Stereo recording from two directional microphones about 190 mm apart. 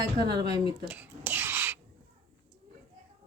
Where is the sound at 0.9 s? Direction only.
10° right (ahead or behind).